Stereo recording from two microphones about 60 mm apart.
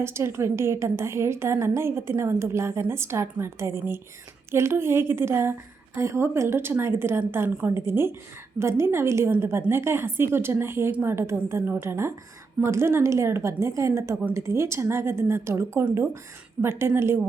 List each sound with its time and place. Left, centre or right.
0.0 s a woman's voice: right